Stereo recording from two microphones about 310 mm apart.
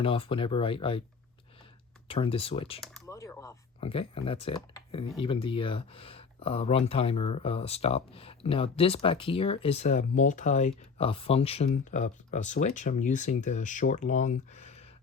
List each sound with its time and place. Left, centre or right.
0.0 s speech: centre
2.0 s speech: centre
2.8 s speech: centre; by 14.8 s left